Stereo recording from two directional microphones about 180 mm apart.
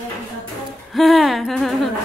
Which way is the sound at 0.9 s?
Centre (ahead or behind).